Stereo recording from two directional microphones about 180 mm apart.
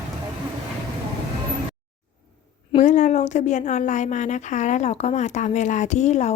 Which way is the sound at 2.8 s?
45° left (ahead or behind).